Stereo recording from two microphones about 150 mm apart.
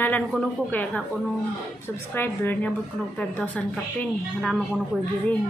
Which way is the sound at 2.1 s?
10° left (ahead or behind).